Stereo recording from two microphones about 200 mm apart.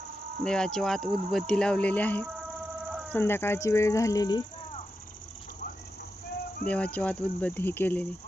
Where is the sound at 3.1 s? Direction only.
10° left (ahead or behind).